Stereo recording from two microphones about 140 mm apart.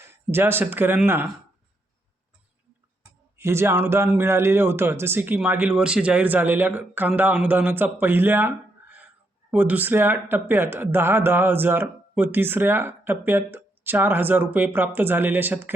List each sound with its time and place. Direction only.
0.0 s speech: 15° right (ahead or behind)
3.3 s a man's voice: 20° right (ahead or behind)